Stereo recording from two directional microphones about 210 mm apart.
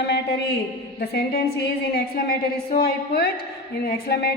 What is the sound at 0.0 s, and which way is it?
A woman's voice, 50° left (ahead or behind).